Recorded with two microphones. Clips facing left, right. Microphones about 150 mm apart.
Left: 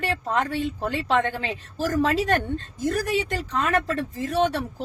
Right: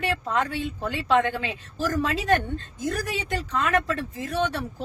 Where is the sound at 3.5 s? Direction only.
40° left (ahead or behind).